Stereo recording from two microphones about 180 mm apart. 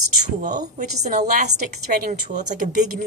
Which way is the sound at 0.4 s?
45° right (ahead or behind).